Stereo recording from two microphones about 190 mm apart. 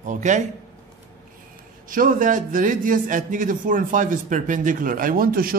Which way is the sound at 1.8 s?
45° right (ahead or behind).